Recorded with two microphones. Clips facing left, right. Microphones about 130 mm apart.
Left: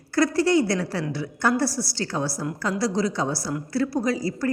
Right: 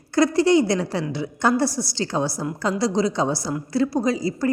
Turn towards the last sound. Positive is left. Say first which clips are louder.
# right 3 dB
turn(degrees=-20)  # may be behind; listen again after turning